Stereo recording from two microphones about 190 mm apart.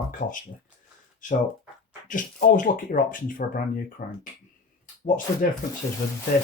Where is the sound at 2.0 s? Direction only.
45° left (ahead or behind).